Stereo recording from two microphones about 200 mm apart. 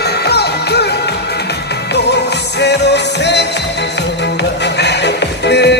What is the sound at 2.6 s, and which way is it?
Music, 60° left (ahead or behind).